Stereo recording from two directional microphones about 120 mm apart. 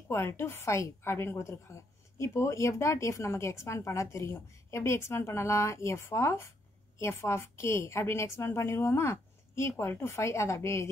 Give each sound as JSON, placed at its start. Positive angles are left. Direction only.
{"t": 0.1, "sound": "a woman's voice", "side_deg": 20}